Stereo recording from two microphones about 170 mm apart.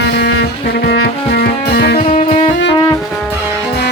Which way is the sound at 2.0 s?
35° left (ahead or behind).